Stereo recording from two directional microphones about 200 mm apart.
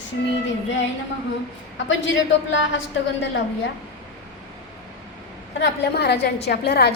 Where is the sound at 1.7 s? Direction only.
65° left (ahead or behind).